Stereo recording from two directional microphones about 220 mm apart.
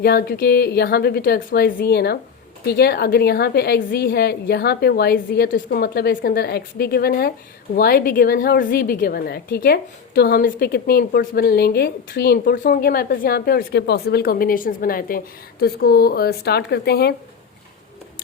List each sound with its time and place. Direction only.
0.0 s a woman's voice: 45° left (ahead or behind)